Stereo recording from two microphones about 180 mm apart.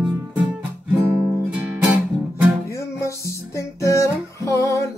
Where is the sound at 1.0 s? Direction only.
10° right (ahead or behind).